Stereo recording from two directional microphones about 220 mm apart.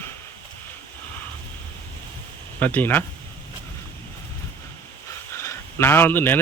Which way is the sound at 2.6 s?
10° left (ahead or behind).